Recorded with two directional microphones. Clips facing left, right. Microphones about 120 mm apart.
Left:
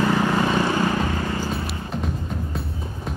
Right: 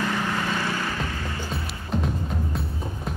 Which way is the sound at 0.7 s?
35° left (ahead or behind).